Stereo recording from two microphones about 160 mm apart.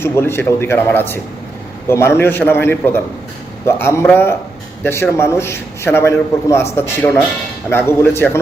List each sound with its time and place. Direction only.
0.0 s a man's voice: 15° left (ahead or behind)